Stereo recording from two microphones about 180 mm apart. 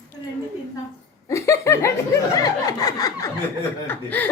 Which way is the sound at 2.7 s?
20° left (ahead or behind).